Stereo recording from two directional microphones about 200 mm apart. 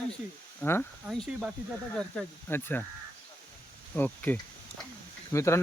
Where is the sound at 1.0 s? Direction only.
Centre (ahead or behind).